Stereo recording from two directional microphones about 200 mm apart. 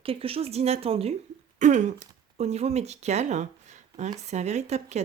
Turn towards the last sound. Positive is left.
turn(degrees=-35)  # may be behind; listen again after turning